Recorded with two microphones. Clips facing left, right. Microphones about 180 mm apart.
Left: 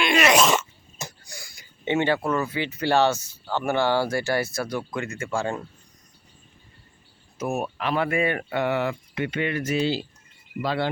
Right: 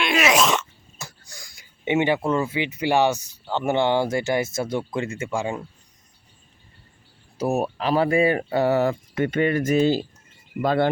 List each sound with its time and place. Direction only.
0.0 s speech: centre (ahead or behind)
0.9 s a sound: 15° left (ahead or behind)
1.8 s speech: 15° right (ahead or behind)
7.3 s speech: 35° right (ahead or behind); by 10.8 s 50° right (ahead or behind)